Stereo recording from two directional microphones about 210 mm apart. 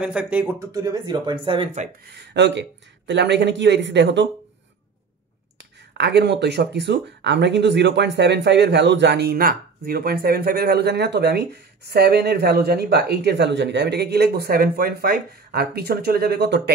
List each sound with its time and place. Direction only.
0.0 s speech: 5° right (ahead or behind); by 1.9 s 25° right (ahead or behind)
2.0 s speech: 55° right (ahead or behind)
5.6 s speech: 55° right (ahead or behind)